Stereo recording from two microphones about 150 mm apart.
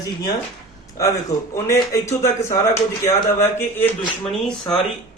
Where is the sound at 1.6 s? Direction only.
20° left (ahead or behind).